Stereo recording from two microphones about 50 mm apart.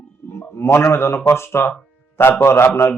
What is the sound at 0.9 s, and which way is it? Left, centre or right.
Speech, left.